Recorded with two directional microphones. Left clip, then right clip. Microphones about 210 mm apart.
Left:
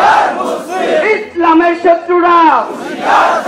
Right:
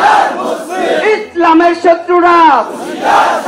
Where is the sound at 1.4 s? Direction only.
55° right (ahead or behind).